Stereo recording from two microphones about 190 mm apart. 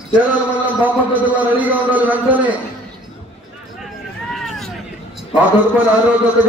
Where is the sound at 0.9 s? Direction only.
10° right (ahead or behind).